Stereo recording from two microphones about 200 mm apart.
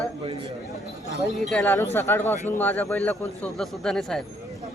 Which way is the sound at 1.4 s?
5° left (ahead or behind).